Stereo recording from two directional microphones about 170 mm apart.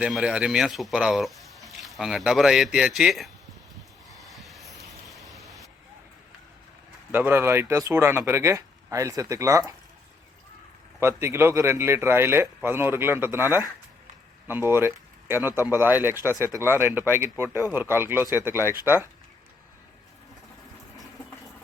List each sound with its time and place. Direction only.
0.0 s speech: 5° right (ahead or behind)
4.2 s vehicle: centre (ahead or behind)
7.1 s speech: 10° right (ahead or behind)
11.0 s speech: 15° right (ahead or behind)